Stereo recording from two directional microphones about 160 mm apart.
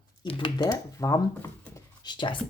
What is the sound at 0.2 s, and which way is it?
Speech, 30° left (ahead or behind).